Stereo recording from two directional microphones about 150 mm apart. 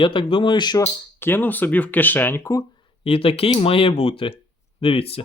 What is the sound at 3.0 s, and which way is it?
Speech, 40° left (ahead or behind).